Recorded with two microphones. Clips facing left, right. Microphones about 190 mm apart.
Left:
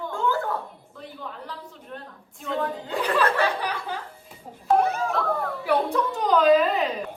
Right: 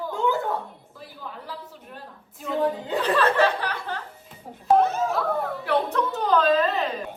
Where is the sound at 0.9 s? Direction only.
5° right (ahead or behind).